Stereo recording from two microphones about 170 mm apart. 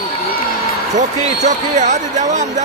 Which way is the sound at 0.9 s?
45° right (ahead or behind).